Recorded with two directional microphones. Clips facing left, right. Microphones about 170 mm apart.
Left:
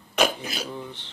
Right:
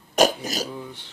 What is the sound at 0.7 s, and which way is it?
Speech, 10° right (ahead or behind).